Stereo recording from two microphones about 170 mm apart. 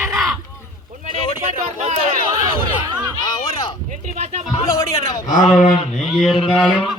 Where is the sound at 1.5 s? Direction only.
40° right (ahead or behind).